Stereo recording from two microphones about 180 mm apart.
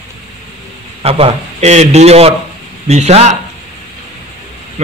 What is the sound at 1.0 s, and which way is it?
Speech, 35° right (ahead or behind).